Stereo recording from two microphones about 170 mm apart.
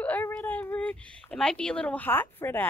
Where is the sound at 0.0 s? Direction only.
10° left (ahead or behind).